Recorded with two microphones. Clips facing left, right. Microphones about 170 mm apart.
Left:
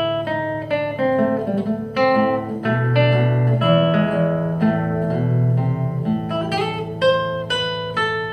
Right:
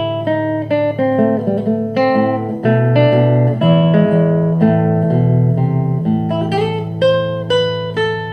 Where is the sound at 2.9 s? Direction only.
50° right (ahead or behind).